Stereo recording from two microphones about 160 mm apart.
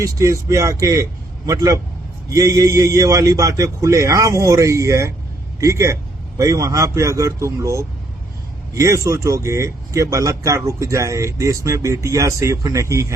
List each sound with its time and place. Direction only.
0.0 s speech: 20° right (ahead or behind)